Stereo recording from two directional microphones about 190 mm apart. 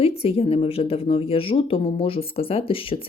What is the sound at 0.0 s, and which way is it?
Speech, 30° left (ahead or behind).